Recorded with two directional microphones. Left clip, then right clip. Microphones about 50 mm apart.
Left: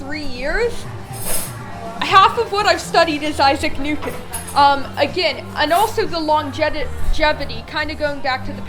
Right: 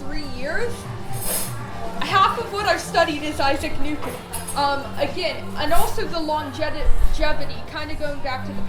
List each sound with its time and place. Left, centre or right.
0.1 s a sound: left
2.0 s a woman's voice: left
4.5 s a woman's voice: left